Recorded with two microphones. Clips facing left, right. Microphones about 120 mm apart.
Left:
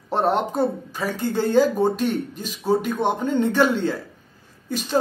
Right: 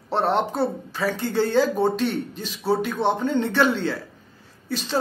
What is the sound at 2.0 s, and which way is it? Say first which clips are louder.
Speech: left 2 dB; 45° left (ahead or behind).